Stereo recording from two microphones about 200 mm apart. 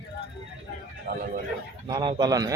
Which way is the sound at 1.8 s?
20° right (ahead or behind).